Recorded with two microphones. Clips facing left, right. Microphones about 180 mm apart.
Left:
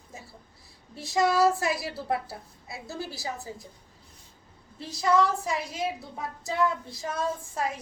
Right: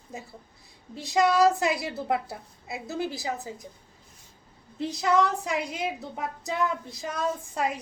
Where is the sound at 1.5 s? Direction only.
20° right (ahead or behind).